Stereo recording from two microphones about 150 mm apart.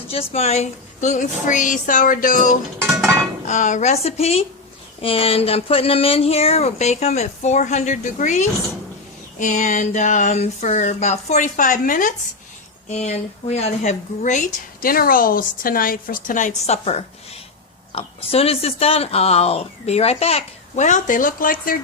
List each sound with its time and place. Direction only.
0.1 s speech: 40° left (ahead or behind); by 12.1 s 65° left (ahead or behind)
12.9 s speech: 50° left (ahead or behind); by 21.8 s 70° left (ahead or behind)